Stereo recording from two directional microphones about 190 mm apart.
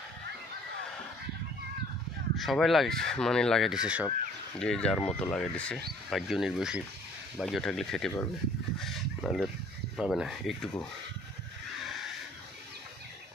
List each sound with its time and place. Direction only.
2.3 s speech: centre (ahead or behind)
4.6 s speech: 5° left (ahead or behind)
8.7 s a sound: centre (ahead or behind)
9.9 s speech: centre (ahead or behind)